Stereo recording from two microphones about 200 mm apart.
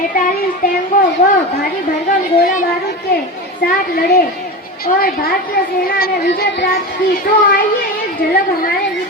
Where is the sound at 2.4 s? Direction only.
40° left (ahead or behind).